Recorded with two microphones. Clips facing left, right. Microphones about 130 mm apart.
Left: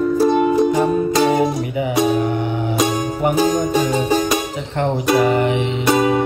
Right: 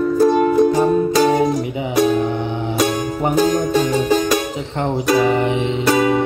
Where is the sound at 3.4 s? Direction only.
5° left (ahead or behind).